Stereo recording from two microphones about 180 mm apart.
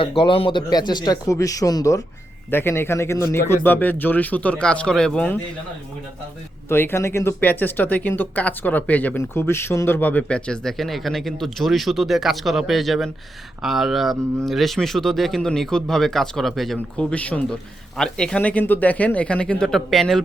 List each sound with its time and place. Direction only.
0.0 s speech: 30° left (ahead or behind); by 5.4 s 5° left (ahead or behind)
6.7 s speech: 15° left (ahead or behind)